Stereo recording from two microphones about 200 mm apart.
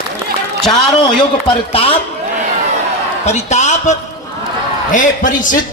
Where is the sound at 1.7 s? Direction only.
30° left (ahead or behind).